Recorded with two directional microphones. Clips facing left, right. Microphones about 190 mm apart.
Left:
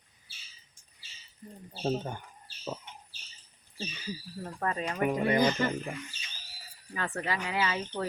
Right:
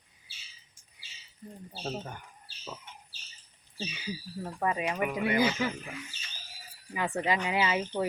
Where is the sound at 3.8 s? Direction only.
10° right (ahead or behind).